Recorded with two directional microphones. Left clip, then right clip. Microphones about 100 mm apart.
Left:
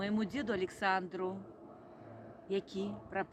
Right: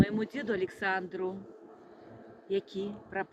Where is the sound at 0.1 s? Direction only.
30° left (ahead or behind).